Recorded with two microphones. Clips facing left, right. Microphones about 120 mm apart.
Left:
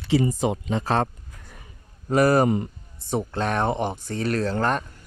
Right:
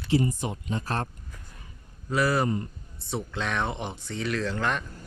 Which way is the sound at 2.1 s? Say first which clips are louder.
Left 7 dB; 50° left (ahead or behind).